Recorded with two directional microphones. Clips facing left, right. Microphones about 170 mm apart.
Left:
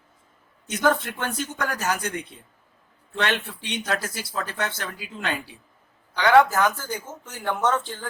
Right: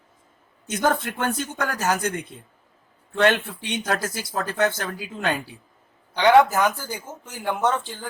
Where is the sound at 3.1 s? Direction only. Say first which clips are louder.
Right 6 dB; 50° right (ahead or behind).